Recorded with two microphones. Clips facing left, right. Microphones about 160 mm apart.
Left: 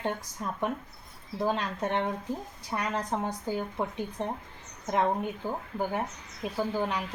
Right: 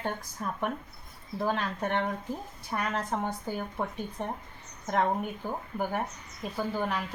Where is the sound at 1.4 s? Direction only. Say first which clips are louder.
Left 1 dB; 15° left (ahead or behind).